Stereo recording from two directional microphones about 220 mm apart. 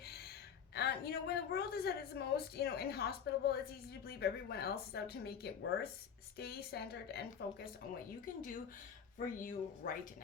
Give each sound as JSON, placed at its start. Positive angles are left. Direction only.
{"t": 0.7, "sound": "a woman's voice", "side_deg": 45}
{"t": 8.2, "sound": "speech", "side_deg": 40}